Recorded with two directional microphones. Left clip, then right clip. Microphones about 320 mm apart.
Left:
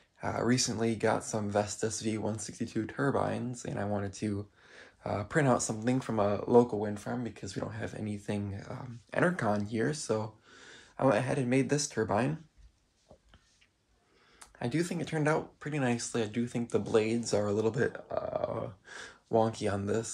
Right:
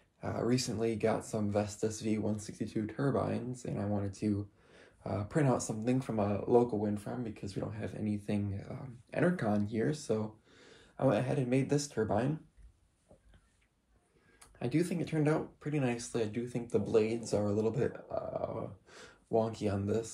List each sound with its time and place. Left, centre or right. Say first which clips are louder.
0.2 s speech: left 3 dB; left
14.4 s speech: even; centre
18.4 s gasp: left 4 dB; left
19.3 s speech: left 3 dB; left